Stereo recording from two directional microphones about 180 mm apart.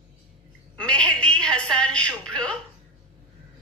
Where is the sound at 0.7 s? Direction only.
5° left (ahead or behind).